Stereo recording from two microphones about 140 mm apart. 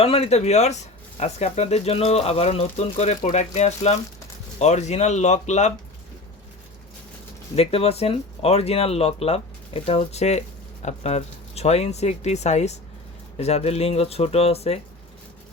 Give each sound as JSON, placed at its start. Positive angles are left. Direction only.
{"t": 0.0, "sound": "speech", "side_deg": 45}
{"t": 7.5, "sound": "speech", "side_deg": 45}